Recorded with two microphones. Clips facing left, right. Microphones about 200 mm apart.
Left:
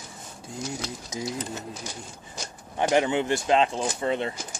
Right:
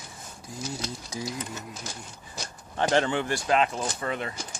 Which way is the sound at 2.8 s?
15° left (ahead or behind).